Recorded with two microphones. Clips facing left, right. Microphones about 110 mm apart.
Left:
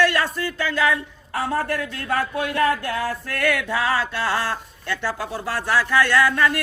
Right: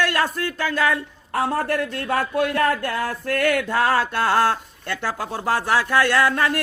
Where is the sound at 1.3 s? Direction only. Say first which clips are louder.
Right 2 dB; 45° right (ahead or behind).